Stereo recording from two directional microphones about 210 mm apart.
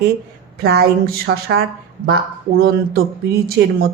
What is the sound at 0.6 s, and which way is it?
A woman's voice, 50° right (ahead or behind).